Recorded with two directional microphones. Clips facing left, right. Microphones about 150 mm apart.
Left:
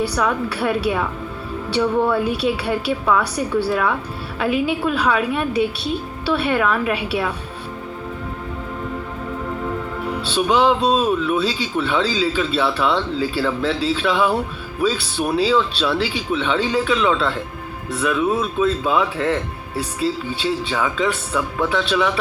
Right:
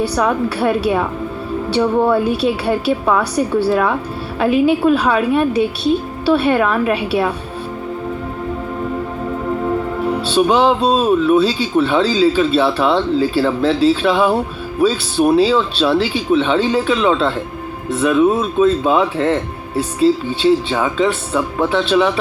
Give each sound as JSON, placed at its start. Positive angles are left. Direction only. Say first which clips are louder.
{"t": 0.0, "sound": "speech", "louder": "right 4 dB", "side_deg": -35}
{"t": 2.0, "sound": "speech", "louder": "right 4 dB", "side_deg": -30}
{"t": 9.6, "sound": "speech", "louder": "right 8 dB", "side_deg": -40}